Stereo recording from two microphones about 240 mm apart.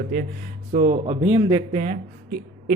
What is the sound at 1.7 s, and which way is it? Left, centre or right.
Speech, right.